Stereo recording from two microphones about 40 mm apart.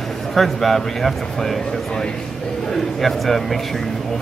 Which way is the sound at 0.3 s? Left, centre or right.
Centre.